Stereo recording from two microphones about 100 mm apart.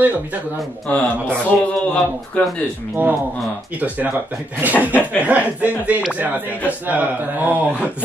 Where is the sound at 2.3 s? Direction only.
15° left (ahead or behind).